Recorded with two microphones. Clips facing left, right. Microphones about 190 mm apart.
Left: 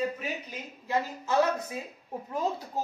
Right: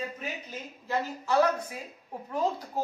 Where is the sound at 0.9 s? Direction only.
20° left (ahead or behind).